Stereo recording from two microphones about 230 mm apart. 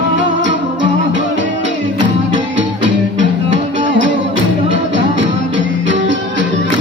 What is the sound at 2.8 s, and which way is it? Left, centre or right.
Music, right.